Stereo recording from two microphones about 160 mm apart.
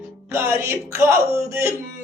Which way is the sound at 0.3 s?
15° right (ahead or behind).